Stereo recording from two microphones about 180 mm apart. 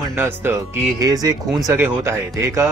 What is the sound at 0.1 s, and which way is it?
A man's voice, 10° right (ahead or behind).